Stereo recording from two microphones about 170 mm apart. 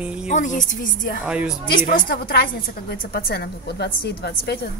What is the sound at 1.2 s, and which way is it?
Speech, 5° right (ahead or behind).